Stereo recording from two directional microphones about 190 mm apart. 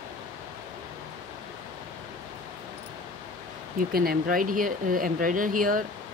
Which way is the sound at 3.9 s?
50° right (ahead or behind).